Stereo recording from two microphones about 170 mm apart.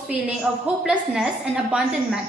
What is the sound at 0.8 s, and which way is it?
Speech, 5° right (ahead or behind).